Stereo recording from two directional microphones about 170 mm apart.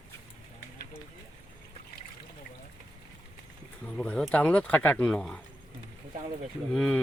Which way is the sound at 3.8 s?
5° left (ahead or behind).